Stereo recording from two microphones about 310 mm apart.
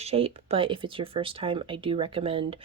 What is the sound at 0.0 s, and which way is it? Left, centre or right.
Speech, centre.